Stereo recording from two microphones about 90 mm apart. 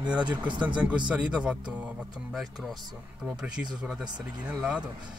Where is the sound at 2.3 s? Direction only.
Centre (ahead or behind).